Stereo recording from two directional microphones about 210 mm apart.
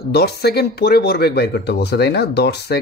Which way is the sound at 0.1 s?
50° left (ahead or behind).